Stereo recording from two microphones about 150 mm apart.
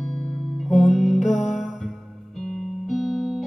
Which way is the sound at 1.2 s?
55° left (ahead or behind).